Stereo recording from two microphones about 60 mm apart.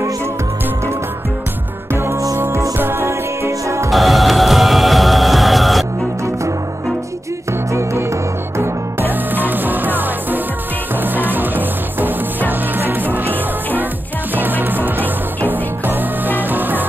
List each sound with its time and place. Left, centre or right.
2.3 s music: right
3.9 s music: centre
9.0 s music: right